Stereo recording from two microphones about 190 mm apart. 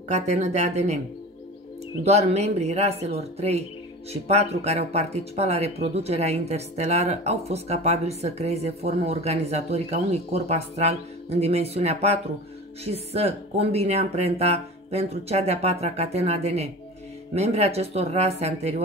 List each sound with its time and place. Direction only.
0.1 s speech: 35° right (ahead or behind)
2.0 s speech: 35° right (ahead or behind)